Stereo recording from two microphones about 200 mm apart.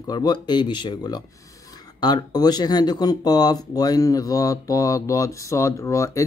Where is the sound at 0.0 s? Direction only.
20° left (ahead or behind).